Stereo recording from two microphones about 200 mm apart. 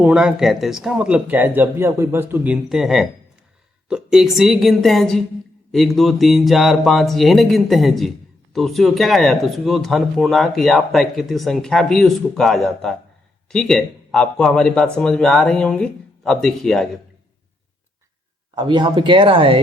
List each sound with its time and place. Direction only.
0.0 s speech: 5° right (ahead or behind)
18.5 s speech: 25° right (ahead or behind)